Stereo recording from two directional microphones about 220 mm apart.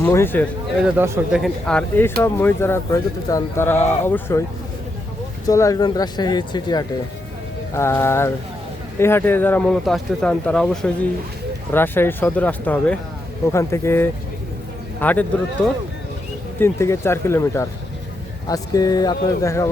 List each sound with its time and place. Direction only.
0.0 s speech: 10° left (ahead or behind)
0.9 s speech: 10° right (ahead or behind)
1.4 s speech: 5° left (ahead or behind)
5.5 s speech: 15° left (ahead or behind)